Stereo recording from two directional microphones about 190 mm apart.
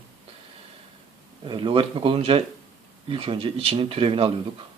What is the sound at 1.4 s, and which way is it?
A man's voice, 25° right (ahead or behind).